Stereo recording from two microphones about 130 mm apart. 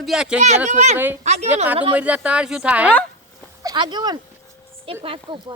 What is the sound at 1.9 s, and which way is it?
Speech, 10° right (ahead or behind).